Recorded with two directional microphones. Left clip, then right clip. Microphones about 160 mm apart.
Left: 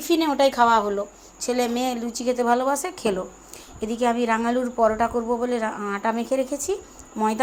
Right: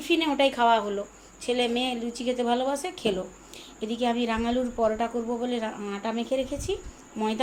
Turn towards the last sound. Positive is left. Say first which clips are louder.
# left 6 dB
turn(degrees=20)  # may be behind; listen again after turning